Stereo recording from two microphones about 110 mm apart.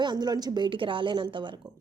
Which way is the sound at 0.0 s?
40° right (ahead or behind).